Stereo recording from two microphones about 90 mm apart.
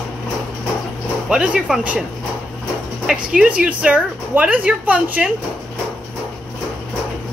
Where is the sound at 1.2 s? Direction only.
10° right (ahead or behind).